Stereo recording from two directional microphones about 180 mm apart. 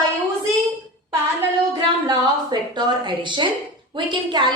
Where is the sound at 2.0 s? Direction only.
25° right (ahead or behind).